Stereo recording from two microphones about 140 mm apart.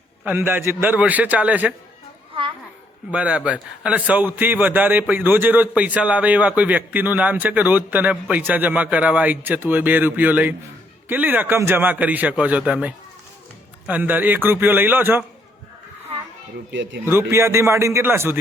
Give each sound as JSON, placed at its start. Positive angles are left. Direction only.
{"t": 0.3, "sound": "a man's voice", "side_deg": -15}
{"t": 2.3, "sound": "a sound", "side_deg": -35}
{"t": 3.1, "sound": "a man's voice", "side_deg": -10}
{"t": 17.1, "sound": "a man's voice", "side_deg": -15}